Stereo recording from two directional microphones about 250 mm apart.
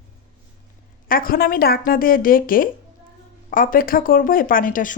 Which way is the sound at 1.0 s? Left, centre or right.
Left.